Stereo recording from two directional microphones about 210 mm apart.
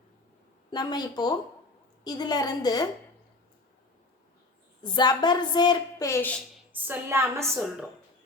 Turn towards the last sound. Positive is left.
turn(degrees=0)  # may be behind; listen again after turning